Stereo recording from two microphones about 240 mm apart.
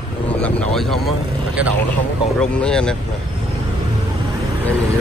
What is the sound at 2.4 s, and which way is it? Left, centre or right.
Speech, centre.